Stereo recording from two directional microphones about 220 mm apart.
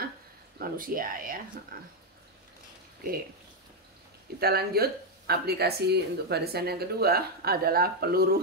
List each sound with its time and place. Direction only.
0.6 s speech: 40° right (ahead or behind)
4.4 s speech: 45° right (ahead or behind)